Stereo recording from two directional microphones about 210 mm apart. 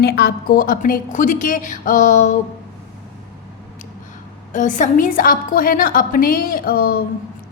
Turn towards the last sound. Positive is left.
turn(degrees=45)  # may be behind; listen again after turning